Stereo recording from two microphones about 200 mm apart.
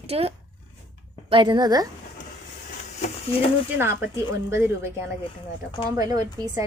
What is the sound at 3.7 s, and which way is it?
A woman's voice, 10° right (ahead or behind).